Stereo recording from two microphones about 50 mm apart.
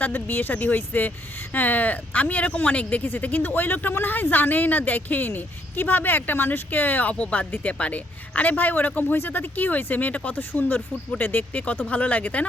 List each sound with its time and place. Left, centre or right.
0.0 s speech: left